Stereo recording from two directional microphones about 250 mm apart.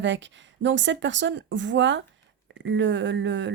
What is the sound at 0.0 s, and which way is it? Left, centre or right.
A woman's voice, right.